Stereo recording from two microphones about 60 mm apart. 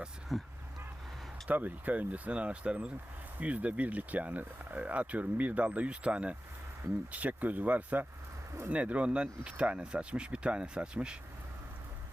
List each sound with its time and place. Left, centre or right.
0.3 s speech: centre
1.5 s speech: right